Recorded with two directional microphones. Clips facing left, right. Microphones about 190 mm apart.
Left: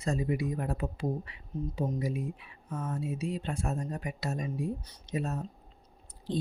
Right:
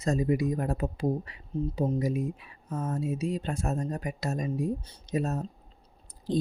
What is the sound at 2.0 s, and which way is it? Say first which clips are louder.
Mantra: right 5 dB; 45° right (ahead or behind).